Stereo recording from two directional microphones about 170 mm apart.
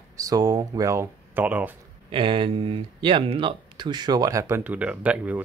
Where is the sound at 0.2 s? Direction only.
20° right (ahead or behind).